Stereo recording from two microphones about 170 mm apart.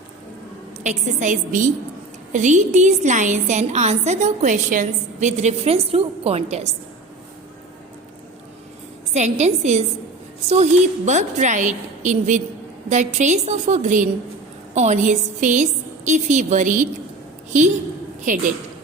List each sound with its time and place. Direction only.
0.8 s a woman's voice: 45° right (ahead or behind)
9.1 s a woman's voice: 40° right (ahead or behind)